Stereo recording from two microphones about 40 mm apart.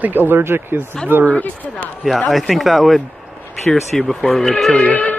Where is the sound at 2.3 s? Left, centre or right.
Centre.